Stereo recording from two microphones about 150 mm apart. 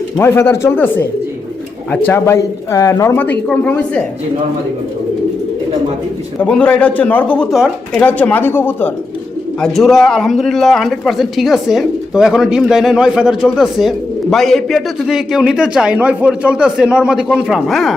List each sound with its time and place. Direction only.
0.2 s speech: 15° left (ahead or behind)
2.0 s speech: 15° left (ahead or behind)
6.4 s speech: 10° left (ahead or behind)
9.6 s speech: centre (ahead or behind)